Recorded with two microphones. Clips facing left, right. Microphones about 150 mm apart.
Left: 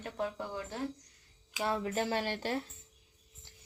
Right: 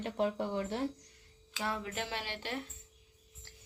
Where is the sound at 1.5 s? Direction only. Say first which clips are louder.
Left 5 dB; 25° left (ahead or behind).